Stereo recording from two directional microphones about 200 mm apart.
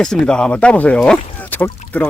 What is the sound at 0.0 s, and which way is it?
Speech, 5° left (ahead or behind).